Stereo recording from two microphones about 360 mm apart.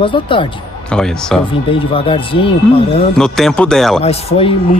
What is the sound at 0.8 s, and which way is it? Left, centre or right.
Speech, centre.